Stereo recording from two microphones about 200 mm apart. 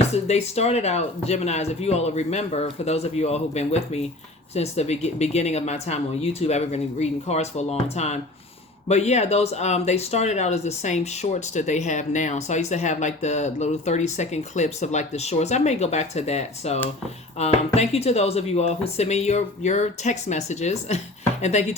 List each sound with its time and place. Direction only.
0.1 s speech: 30° left (ahead or behind)